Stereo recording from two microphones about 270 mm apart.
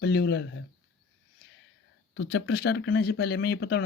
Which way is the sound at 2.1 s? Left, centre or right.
Left.